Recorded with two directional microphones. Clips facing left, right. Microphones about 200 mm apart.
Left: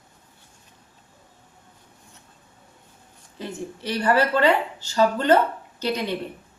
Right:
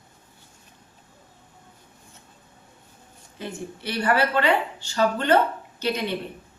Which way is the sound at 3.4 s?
40° left (ahead or behind).